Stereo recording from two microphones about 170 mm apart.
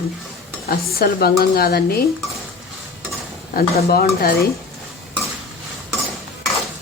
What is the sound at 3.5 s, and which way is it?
Speech, 60° left (ahead or behind).